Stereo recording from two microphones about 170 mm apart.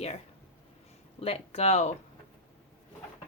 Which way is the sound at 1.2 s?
35° left (ahead or behind).